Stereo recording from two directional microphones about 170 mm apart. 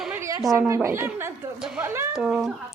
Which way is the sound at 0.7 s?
15° right (ahead or behind).